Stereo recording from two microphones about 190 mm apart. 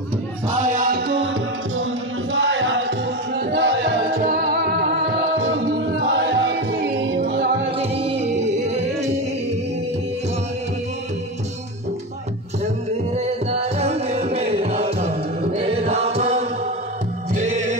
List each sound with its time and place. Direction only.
0.5 s music: 40° right (ahead or behind); by 1.3 s 65° right (ahead or behind)
2.3 s music: 75° right (ahead or behind)
7.8 s music: 30° right (ahead or behind)
12.9 s music: 35° right (ahead or behind)